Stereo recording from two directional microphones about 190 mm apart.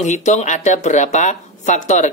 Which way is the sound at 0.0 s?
40° left (ahead or behind).